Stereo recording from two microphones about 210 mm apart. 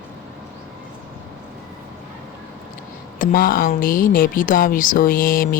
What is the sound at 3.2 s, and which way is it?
Speech, 40° left (ahead or behind).